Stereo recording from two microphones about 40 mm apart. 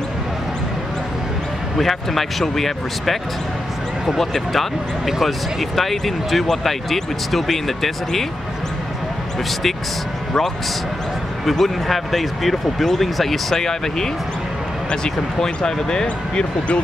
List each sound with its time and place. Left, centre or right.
1.8 s speech: centre
4.2 s speech: centre
11.4 s speech: centre